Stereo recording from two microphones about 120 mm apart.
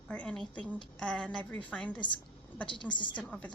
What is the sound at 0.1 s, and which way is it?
Speech, 10° left (ahead or behind).